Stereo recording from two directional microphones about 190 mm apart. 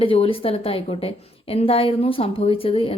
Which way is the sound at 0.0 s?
30° left (ahead or behind).